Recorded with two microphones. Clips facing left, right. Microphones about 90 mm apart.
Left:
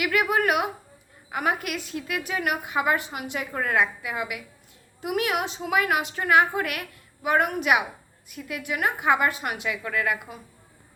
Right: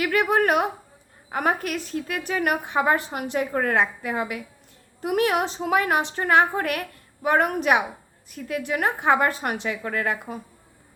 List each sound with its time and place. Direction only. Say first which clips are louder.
0.0 s a woman's voice: right 2 dB; 35° right (ahead or behind)